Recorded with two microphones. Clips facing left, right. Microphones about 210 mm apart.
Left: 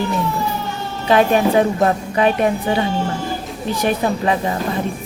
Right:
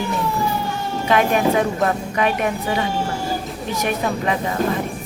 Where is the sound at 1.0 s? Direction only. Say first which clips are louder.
Left 3 dB; 30° left (ahead or behind).